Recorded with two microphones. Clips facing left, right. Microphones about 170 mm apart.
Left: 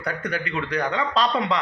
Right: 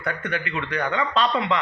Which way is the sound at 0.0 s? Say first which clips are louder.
Even; 40° left (ahead or behind).